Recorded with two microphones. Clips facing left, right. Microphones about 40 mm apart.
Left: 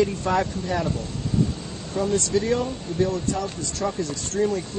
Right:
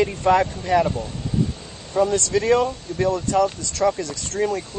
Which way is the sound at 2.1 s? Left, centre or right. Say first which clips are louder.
Even; right.